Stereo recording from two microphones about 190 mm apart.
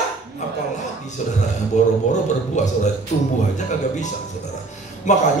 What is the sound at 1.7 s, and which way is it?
A man's voice, 40° left (ahead or behind).